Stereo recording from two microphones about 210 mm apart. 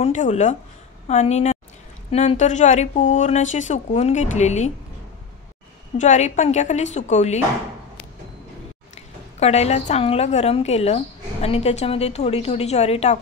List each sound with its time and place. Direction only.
0.0 s a woman's voice: 35° left (ahead or behind)
5.9 s a woman's voice: 35° left (ahead or behind)
8.9 s a woman's voice: 30° left (ahead or behind)